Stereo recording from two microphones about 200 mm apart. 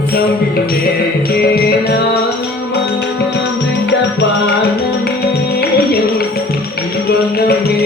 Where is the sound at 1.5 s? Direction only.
50° left (ahead or behind).